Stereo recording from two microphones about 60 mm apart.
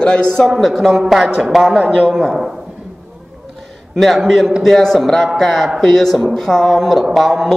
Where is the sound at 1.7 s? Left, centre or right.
Centre.